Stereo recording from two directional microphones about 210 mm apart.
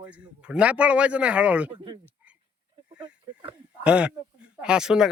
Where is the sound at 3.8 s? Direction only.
5° right (ahead or behind).